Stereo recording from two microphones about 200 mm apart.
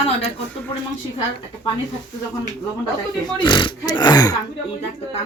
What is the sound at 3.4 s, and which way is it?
Speech, 25° left (ahead or behind).